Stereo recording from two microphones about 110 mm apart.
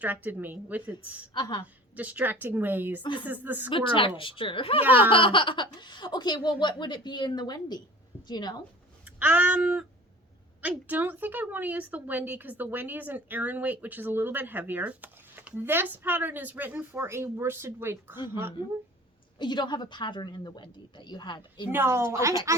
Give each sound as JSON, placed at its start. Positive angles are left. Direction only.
{"t": 0.0, "sound": "speech", "side_deg": -15}
{"t": 1.3, "sound": "speech", "side_deg": 45}
{"t": 1.6, "sound": "speech", "side_deg": -15}
{"t": 3.0, "sound": "speech", "side_deg": 45}
{"t": 3.2, "sound": "speech", "side_deg": -15}
{"t": 3.7, "sound": "speech", "side_deg": 50}
{"t": 4.8, "sound": "speech", "side_deg": -15}
{"t": 5.0, "sound": "a woman's voice", "side_deg": 50}
{"t": 9.1, "sound": "speech", "side_deg": -15}
{"t": 19.4, "sound": "speech", "side_deg": 45}
{"t": 21.7, "sound": "a woman's voice", "side_deg": -20}